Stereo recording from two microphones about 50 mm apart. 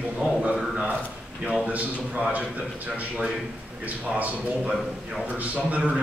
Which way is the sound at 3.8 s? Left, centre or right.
Right.